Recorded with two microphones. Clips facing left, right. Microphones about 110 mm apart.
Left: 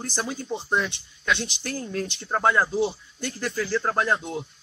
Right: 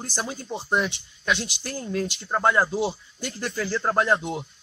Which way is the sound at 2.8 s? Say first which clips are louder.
Left 1 dB; 15° right (ahead or behind).